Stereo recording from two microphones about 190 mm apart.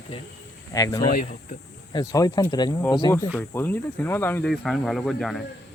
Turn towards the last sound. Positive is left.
turn(degrees=0)  # may be behind; listen again after turning